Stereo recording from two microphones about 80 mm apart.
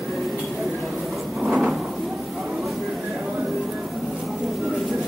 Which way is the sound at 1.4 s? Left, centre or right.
Centre.